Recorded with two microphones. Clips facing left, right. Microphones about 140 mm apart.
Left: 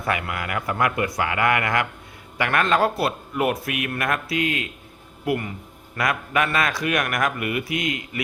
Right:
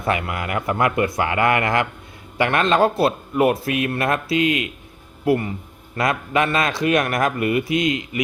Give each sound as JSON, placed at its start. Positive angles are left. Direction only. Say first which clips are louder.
{"t": 0.0, "sound": "speech", "louder": "right 3 dB", "side_deg": -25}
{"t": 5.2, "sound": "speech", "louder": "right 5 dB", "side_deg": -30}